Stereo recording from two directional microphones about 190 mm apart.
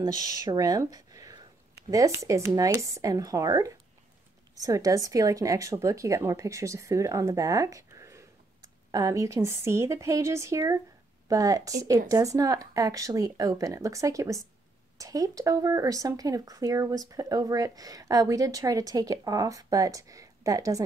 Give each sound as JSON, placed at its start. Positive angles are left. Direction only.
{"t": 0.0, "sound": "a woman's voice", "side_deg": -20}